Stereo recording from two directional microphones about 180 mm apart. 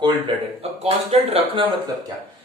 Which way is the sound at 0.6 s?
35° right (ahead or behind).